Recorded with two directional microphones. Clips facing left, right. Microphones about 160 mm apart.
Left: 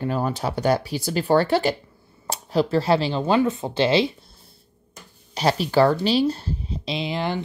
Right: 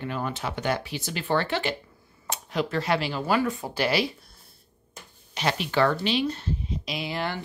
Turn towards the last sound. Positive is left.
turn(degrees=20)  # may be behind; listen again after turning